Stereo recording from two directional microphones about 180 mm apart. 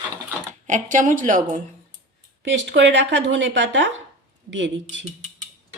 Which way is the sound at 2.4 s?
85° right.